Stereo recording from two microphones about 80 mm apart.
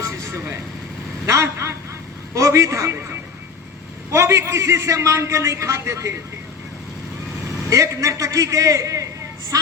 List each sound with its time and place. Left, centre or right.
0.0 s vehicle: right
1.2 s a man's voice: right
7.7 s a man's voice: right